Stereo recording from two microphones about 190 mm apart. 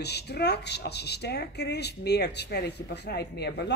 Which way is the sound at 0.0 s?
60° left (ahead or behind).